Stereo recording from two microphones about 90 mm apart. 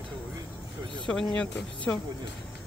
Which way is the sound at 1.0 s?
10° left (ahead or behind).